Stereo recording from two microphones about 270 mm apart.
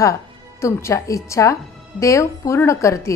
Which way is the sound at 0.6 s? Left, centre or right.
Centre.